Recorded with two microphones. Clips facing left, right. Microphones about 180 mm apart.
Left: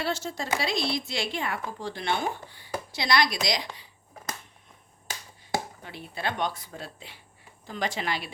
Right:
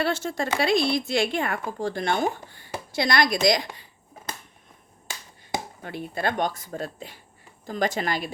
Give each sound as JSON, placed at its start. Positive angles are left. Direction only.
{"t": 0.0, "sound": "speech", "side_deg": -55}
{"t": 5.8, "sound": "speech", "side_deg": -50}